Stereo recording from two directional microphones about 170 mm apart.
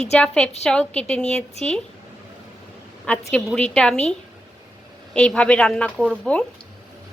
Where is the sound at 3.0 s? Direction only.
10° left (ahead or behind).